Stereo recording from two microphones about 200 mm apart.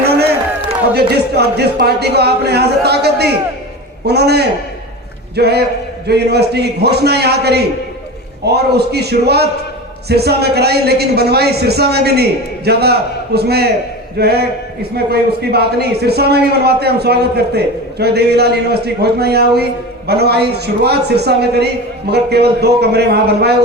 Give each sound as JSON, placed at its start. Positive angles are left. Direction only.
{"t": 0.9, "sound": "a man's voice", "side_deg": -55}